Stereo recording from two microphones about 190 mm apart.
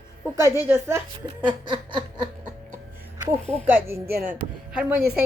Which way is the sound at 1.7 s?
25° right (ahead or behind).